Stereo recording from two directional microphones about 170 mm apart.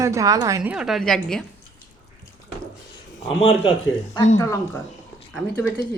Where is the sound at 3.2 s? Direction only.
35° left (ahead or behind).